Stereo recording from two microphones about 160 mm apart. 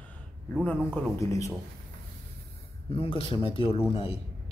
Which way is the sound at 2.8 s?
35° left (ahead or behind).